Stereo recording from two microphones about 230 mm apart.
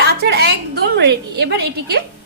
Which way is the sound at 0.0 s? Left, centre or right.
Right.